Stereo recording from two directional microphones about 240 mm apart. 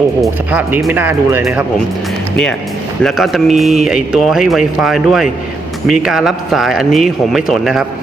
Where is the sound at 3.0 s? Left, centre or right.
Centre.